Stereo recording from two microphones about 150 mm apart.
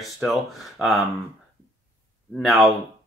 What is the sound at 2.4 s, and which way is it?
Speech, centre (ahead or behind).